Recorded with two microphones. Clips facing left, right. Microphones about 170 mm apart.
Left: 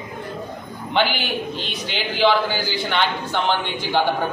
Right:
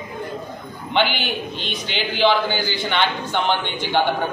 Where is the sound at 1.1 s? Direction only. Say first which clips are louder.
Left 1 dB; 40° left (ahead or behind).